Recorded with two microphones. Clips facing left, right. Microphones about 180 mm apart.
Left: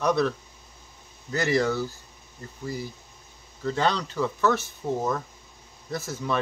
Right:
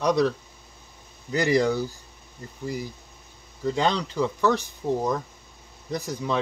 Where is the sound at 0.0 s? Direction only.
15° right (ahead or behind).